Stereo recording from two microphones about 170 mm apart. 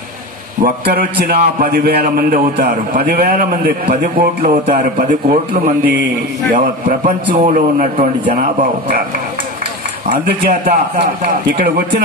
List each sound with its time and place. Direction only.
0.7 s a man's voice: 65° right (ahead or behind)
5.0 s a man's voice: 45° right (ahead or behind)
6.5 s a man's voice: 50° right (ahead or behind)
10.6 s a man's voice: 55° right (ahead or behind)